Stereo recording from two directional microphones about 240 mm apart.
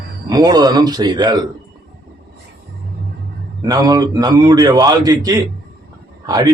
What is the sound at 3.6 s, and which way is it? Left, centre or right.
A man's voice, centre.